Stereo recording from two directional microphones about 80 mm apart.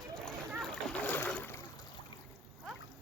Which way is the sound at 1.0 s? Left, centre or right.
Left.